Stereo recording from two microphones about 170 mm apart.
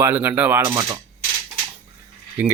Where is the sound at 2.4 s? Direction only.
10° right (ahead or behind).